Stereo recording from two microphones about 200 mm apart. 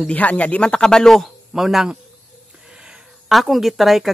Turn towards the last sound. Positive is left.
turn(degrees=0)  # may be behind; listen again after turning